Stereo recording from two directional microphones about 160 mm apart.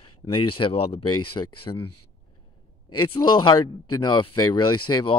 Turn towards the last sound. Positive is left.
turn(degrees=30)  # may be behind; listen again after turning